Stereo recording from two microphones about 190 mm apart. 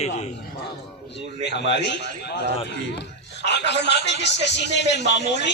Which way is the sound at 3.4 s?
65° left (ahead or behind).